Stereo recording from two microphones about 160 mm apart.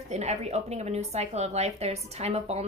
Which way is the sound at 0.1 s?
45° right (ahead or behind).